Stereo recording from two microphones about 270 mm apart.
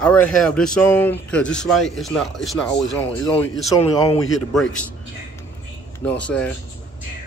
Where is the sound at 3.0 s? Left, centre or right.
Left.